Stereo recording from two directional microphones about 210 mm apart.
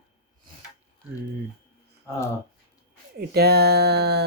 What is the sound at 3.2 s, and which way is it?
Speech, 50° right (ahead or behind).